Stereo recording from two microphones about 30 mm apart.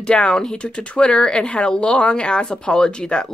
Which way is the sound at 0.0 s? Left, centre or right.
Left.